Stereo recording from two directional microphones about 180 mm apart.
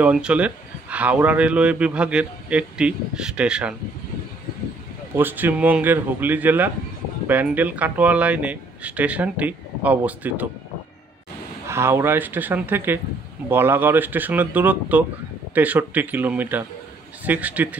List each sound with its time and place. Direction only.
0.0 s speech: 5° right (ahead or behind)
5.1 s speech: 10° right (ahead or behind)
11.6 s speech: 15° right (ahead or behind)